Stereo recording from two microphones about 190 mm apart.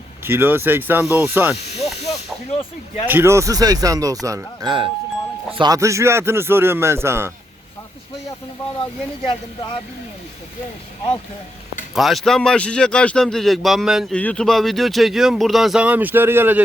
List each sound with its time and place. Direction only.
0.3 s a man's voice: 10° right (ahead or behind)
1.8 s speech: 30° left (ahead or behind)
3.1 s a man's voice: 10° right (ahead or behind)
8.8 s speech: 25° left (ahead or behind)
11.9 s speech: centre (ahead or behind)